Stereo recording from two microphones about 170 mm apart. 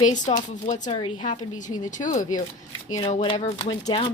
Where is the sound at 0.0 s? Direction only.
45° left (ahead or behind).